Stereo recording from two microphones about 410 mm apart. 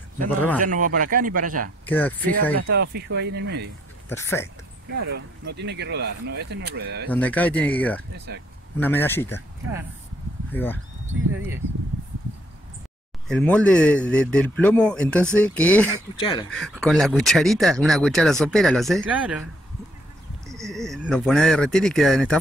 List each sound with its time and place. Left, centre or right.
0.6 s speech: centre
1.9 s speech: centre
2.7 s speech: right
4.1 s speech: centre
5.1 s speech: right
7.1 s speech: centre
8.3 s speech: right
8.7 s speech: centre
10.5 s speech: centre
13.3 s speech: centre
20.4 s speech: centre